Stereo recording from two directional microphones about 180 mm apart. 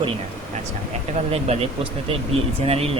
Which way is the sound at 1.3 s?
30° right (ahead or behind).